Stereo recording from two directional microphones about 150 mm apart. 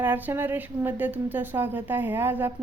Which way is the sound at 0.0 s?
10° right (ahead or behind).